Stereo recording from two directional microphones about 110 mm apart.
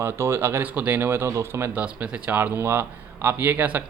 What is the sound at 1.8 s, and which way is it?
Speech, 10° right (ahead or behind).